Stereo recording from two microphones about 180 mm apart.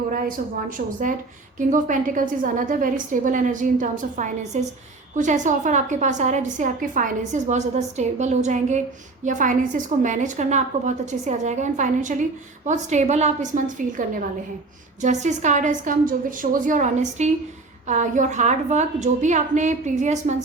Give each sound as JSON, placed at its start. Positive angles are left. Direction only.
{"t": 0.1, "sound": "a woman's voice", "side_deg": -50}